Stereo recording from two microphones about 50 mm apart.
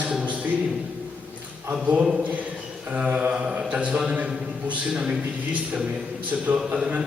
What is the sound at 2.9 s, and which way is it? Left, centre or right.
A man's voice, right.